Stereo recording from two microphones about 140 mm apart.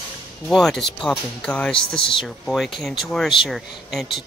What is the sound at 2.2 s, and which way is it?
Speech, centre (ahead or behind).